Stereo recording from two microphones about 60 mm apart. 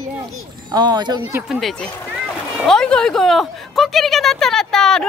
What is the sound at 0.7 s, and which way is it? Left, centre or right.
Speech, right.